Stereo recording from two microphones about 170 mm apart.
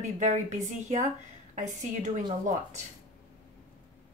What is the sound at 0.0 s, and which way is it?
A woman's voice, 45° right (ahead or behind).